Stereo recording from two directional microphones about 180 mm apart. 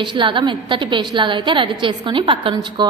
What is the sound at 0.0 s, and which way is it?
A woman's voice, 25° right (ahead or behind).